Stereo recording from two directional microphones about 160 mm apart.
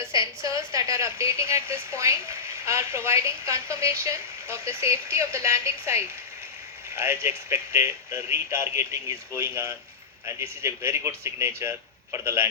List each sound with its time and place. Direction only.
0.0 s a woman's voice: 20° right (ahead or behind)